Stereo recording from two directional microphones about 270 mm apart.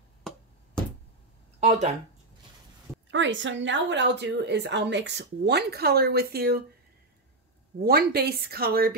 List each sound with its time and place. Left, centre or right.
1.6 s speech: right
3.1 s a woman's voice: right
7.8 s a woman's voice: right